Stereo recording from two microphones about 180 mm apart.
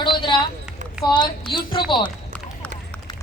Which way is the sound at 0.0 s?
25° left (ahead or behind).